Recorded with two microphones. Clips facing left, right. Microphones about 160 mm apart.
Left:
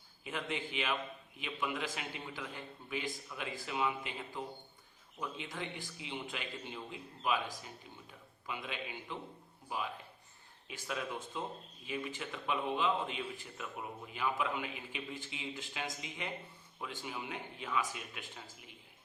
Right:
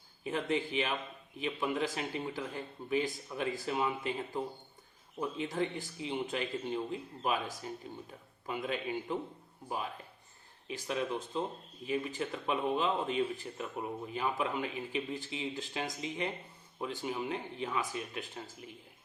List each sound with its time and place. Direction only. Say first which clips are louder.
0.3 s a man's voice: right 7 dB; 40° right (ahead or behind)
10.7 s speech: right 6 dB; 30° right (ahead or behind)
11.9 s speech: right 6 dB; 40° right (ahead or behind)